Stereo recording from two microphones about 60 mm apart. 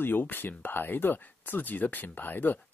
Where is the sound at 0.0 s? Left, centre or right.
Left.